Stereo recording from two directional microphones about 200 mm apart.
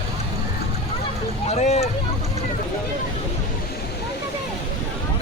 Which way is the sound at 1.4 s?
35° left (ahead or behind).